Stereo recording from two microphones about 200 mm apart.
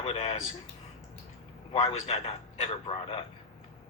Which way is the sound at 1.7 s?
30° left (ahead or behind).